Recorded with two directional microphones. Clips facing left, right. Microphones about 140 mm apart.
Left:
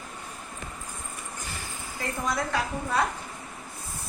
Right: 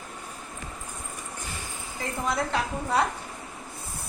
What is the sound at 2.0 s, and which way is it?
A woman's voice, 25° right (ahead or behind).